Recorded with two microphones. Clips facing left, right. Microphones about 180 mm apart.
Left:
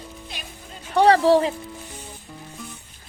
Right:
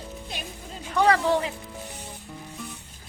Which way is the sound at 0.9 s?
35° left (ahead or behind).